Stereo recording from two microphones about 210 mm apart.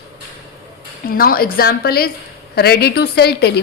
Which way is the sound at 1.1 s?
45° left (ahead or behind).